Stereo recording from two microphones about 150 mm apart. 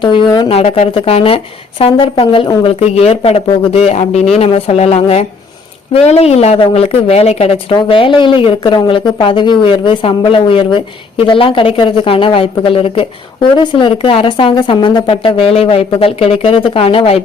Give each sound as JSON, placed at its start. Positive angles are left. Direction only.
{"t": 0.0, "sound": "speech", "side_deg": 35}